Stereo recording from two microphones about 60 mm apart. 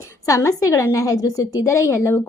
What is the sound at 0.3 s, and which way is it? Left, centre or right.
A woman's voice, left.